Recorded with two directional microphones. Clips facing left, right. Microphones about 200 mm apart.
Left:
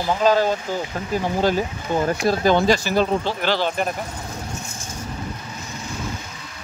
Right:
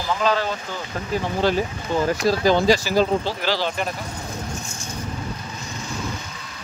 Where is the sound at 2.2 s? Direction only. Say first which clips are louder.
Even; 55° left (ahead or behind).